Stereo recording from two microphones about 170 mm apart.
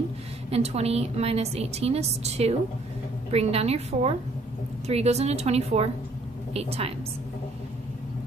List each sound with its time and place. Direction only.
0.5 s a woman's voice: 40° right (ahead or behind)